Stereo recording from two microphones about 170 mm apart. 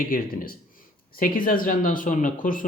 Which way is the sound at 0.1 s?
60° left (ahead or behind).